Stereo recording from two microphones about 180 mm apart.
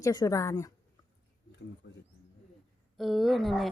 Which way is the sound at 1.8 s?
75° left (ahead or behind).